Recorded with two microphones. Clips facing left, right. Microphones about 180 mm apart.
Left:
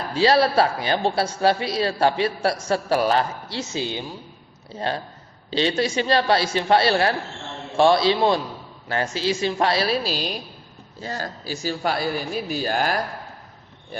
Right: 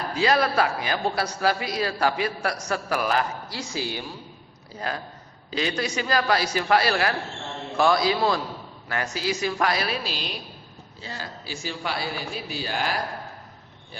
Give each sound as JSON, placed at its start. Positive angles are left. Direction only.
{"t": 0.1, "sound": "a man's voice", "side_deg": 30}